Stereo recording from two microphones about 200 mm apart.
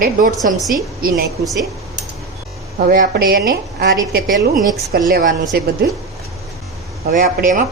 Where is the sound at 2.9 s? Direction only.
50° right (ahead or behind).